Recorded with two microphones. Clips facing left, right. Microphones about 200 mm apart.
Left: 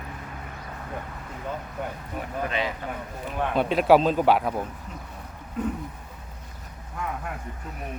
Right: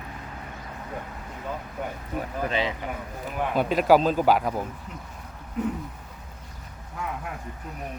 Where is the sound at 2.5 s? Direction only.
30° right (ahead or behind).